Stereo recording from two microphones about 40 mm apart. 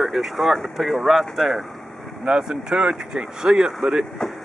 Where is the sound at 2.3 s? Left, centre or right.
Centre.